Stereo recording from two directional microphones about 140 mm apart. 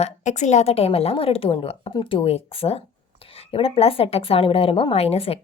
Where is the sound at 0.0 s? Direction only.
60° left (ahead or behind).